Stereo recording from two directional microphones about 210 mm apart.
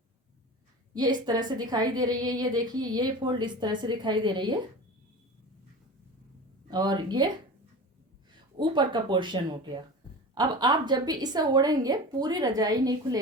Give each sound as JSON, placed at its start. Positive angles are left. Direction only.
{"t": 0.9, "sound": "a woman's voice", "side_deg": -20}
{"t": 6.7, "sound": "a woman's voice", "side_deg": -20}
{"t": 8.5, "sound": "a woman's voice", "side_deg": -20}